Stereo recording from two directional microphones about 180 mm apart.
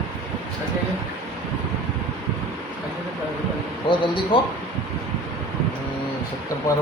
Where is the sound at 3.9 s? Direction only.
30° left (ahead or behind).